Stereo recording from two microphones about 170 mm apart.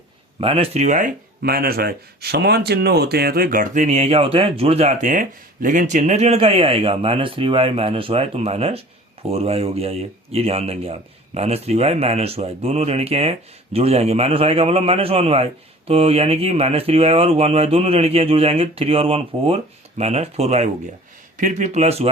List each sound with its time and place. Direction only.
0.3 s speech: 35° right (ahead or behind)
1.4 s speech: 60° right (ahead or behind); by 22.1 s 35° right (ahead or behind)